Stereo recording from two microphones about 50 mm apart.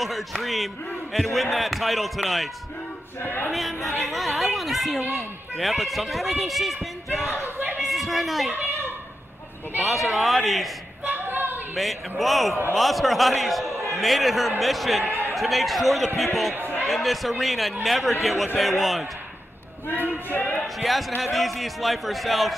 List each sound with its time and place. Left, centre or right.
0.0 s speech: centre
3.3 s speech: left
3.5 s a woman's voice: centre
9.8 s speech: centre
11.1 s a sound: right
11.7 s a man's voice: centre
20.2 s speech: left
20.8 s speech: centre